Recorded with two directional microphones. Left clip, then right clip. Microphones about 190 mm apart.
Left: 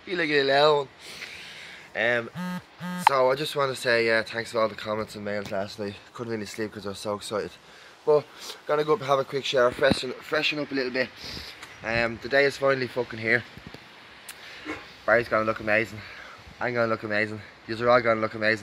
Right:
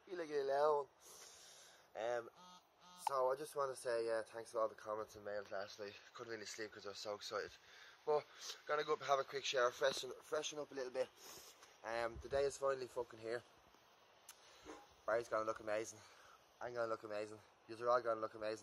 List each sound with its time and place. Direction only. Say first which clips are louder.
0.1 s speech: left 18 dB; 5° right (ahead or behind)
15.0 s speech: left 17 dB; 10° right (ahead or behind)